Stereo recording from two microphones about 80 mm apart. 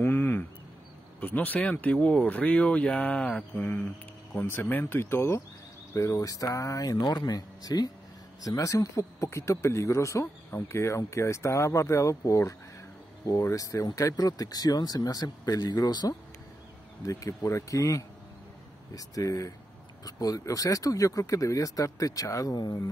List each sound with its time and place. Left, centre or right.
0.0 s a sound: left
1.2 s speech: centre
3.5 s speech: left
17.0 s speech: left